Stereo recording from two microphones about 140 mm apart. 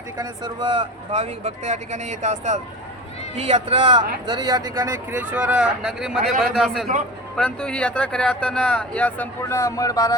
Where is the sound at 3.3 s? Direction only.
45° right (ahead or behind).